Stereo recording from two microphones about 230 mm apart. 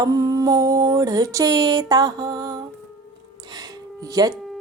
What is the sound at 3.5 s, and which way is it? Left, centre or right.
Music, centre.